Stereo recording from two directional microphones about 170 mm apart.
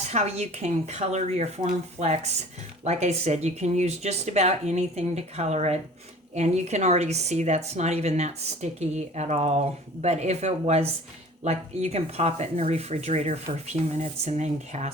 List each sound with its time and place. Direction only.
0.0 s speech: 40° right (ahead or behind)